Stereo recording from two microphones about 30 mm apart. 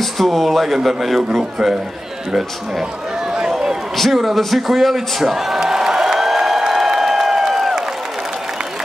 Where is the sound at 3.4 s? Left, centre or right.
Right.